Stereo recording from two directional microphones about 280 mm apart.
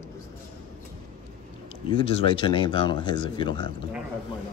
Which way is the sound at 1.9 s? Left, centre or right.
Centre.